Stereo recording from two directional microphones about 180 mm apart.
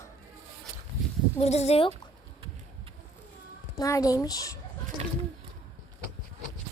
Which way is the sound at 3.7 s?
20° left (ahead or behind).